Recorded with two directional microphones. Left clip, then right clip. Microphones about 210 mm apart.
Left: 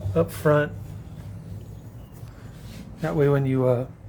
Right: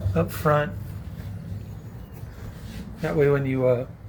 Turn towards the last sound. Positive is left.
turn(degrees=30)  # may be behind; listen again after turning